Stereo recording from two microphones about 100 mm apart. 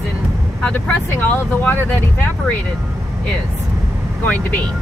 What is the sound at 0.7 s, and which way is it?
Speech, 15° left (ahead or behind).